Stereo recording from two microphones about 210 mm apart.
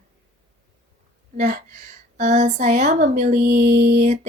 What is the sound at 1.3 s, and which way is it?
A woman's voice, 35° right (ahead or behind).